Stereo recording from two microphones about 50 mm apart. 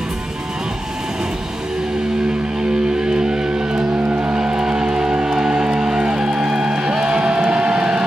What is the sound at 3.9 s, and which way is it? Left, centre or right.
Music, right.